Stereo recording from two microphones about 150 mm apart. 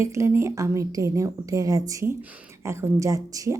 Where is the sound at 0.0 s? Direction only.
20° right (ahead or behind).